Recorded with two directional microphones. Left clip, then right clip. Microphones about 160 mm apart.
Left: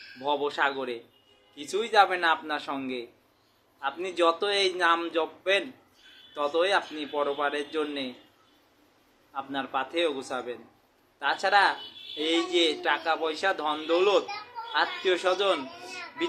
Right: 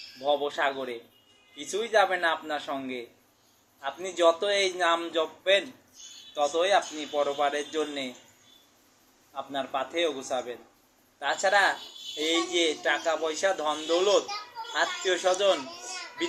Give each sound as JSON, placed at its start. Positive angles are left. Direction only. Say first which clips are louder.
{"t": 0.3, "sound": "a man's voice", "louder": "even", "side_deg": 25}
{"t": 9.3, "sound": "a man's voice", "louder": "left 1 dB", "side_deg": 25}